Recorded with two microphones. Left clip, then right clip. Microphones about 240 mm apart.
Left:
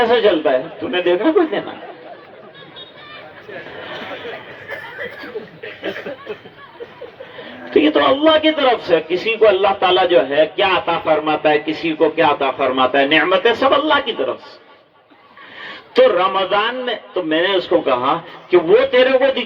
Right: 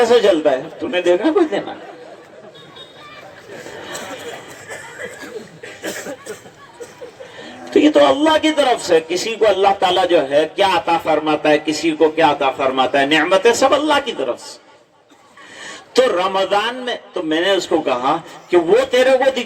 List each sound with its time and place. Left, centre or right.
0.0 s a man's voice: right
7.7 s a man's voice: right
15.9 s a man's voice: right